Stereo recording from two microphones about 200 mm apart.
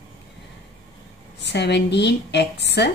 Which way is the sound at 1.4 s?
60° left (ahead or behind).